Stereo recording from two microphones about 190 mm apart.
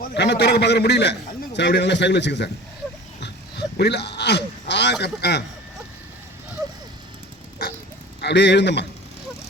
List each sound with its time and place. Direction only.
0.0 s a man's voice: 60° left (ahead or behind)
3.8 s speech: 60° left (ahead or behind)
8.2 s a man's voice: 65° left (ahead or behind)